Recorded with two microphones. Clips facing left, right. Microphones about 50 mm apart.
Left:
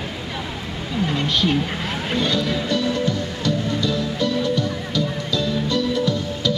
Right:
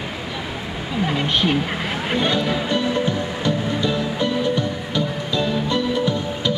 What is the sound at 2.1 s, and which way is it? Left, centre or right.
Music, right.